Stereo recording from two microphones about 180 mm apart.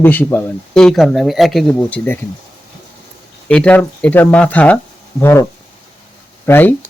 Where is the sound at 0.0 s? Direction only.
10° left (ahead or behind).